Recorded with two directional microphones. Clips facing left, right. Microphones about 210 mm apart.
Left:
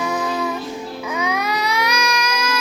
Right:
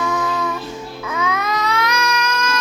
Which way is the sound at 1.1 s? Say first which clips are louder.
Right 1 dB; 15° left (ahead or behind).